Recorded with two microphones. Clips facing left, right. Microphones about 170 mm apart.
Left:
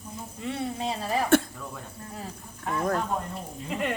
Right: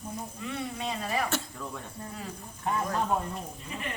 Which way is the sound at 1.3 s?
55° left (ahead or behind).